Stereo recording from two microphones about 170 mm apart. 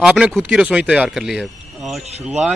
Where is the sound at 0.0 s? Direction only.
5° right (ahead or behind).